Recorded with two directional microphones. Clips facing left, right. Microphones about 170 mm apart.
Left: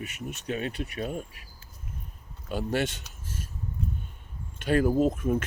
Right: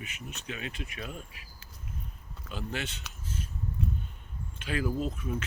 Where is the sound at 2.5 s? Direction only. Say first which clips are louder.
Left 8 dB; 45° left (ahead or behind).